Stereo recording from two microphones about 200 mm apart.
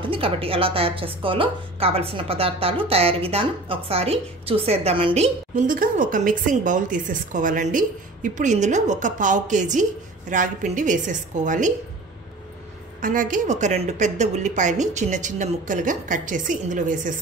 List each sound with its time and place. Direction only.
0.0 s a woman's voice: 25° right (ahead or behind)
13.0 s a woman's voice: 40° right (ahead or behind)